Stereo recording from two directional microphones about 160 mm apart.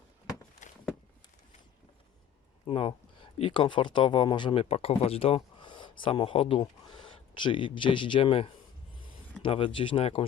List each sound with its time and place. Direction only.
0.6 s walk: 50° left (ahead or behind)
2.6 s speech: 35° left (ahead or behind)